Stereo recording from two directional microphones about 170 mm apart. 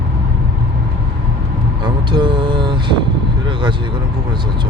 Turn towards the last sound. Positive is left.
turn(degrees=-25)  # may be behind; listen again after turning